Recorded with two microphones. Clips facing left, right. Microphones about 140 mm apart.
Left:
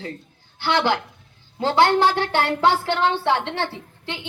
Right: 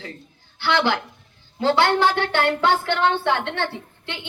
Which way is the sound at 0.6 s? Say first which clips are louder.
Even; 45° left (ahead or behind).